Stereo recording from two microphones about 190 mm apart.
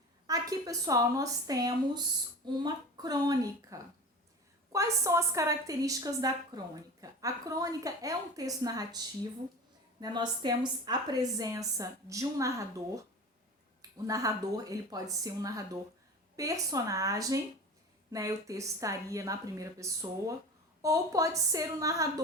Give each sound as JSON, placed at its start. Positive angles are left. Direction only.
{"t": 0.3, "sound": "a woman's voice", "side_deg": -20}
{"t": 10.0, "sound": "a woman's voice", "side_deg": -20}
{"t": 14.1, "sound": "a woman's voice", "side_deg": -15}